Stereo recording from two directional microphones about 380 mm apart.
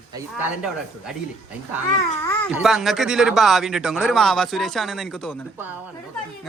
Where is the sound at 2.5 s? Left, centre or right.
Centre.